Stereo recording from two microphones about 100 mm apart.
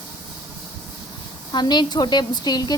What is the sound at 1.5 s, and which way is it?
A woman's voice, 45° left (ahead or behind).